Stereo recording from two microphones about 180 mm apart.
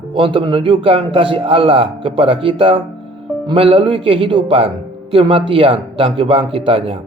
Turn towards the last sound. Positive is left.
turn(degrees=-30)  # may be behind; listen again after turning